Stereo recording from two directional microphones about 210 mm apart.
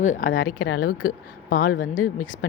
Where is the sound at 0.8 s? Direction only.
45° left (ahead or behind).